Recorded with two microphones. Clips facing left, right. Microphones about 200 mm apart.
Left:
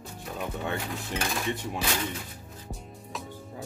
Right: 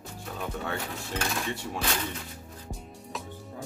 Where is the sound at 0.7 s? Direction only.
15° left (ahead or behind).